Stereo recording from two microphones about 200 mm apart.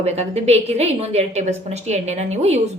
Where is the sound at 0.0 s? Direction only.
30° right (ahead or behind).